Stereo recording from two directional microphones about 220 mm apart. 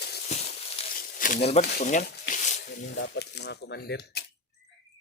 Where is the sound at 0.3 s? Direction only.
30° left (ahead or behind); by 2.4 s 50° left (ahead or behind).